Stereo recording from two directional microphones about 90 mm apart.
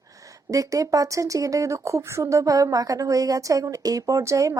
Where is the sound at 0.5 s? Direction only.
40° right (ahead or behind).